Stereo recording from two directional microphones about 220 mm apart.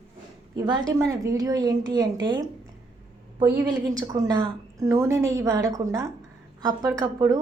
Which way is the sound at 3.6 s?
15° right (ahead or behind).